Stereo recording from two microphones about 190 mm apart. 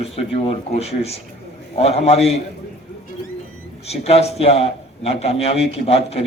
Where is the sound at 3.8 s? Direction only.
35° left (ahead or behind).